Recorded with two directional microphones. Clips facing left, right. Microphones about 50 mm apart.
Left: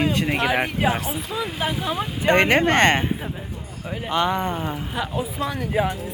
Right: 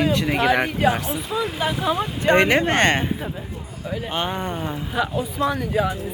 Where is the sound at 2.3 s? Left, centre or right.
Left.